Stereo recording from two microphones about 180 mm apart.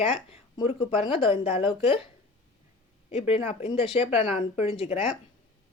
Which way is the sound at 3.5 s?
35° left (ahead or behind).